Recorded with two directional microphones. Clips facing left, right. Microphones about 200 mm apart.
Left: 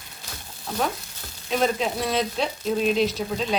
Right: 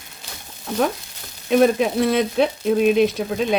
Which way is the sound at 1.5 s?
55° right (ahead or behind).